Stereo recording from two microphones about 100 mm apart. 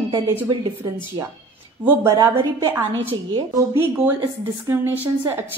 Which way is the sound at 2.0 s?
35° right (ahead or behind).